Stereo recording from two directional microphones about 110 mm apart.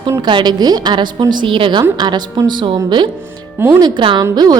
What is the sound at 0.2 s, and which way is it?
A woman's voice, 45° right (ahead or behind).